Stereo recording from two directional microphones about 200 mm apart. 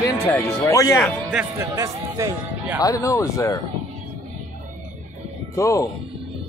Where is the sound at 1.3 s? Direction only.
10° right (ahead or behind).